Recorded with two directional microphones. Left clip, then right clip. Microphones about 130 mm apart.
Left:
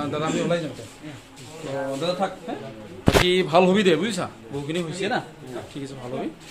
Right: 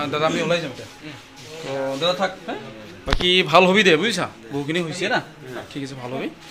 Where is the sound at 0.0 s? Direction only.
30° right (ahead or behind).